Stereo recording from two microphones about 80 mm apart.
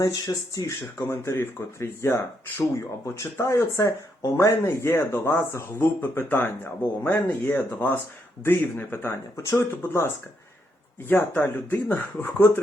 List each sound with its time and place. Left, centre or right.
0.0 s speech: left
0.9 s speech: left
11.1 s speech: left